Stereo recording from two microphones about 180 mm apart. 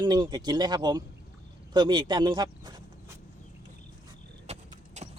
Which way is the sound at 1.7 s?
25° right (ahead or behind).